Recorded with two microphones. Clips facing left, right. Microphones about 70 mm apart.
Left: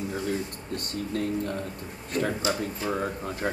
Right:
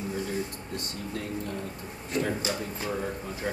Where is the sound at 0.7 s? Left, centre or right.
Left.